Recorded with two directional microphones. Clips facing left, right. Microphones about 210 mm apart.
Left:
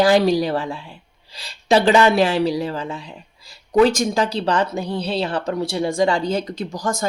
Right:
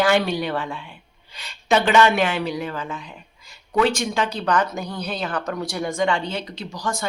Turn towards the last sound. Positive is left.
turn(degrees=45)  # may be behind; listen again after turning